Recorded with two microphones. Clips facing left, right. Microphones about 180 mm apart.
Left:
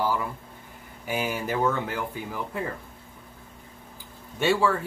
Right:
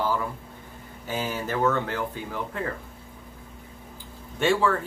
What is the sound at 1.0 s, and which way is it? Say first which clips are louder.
Speech: left 1 dB; 10° left (ahead or behind).